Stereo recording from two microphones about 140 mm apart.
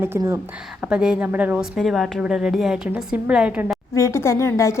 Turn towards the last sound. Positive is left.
turn(degrees=20)  # may be behind; listen again after turning